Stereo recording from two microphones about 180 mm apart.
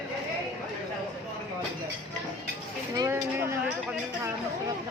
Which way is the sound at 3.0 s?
15° right (ahead or behind).